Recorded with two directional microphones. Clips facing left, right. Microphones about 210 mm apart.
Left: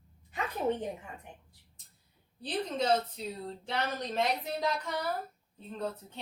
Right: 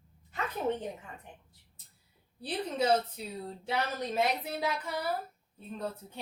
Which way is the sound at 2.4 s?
10° right (ahead or behind).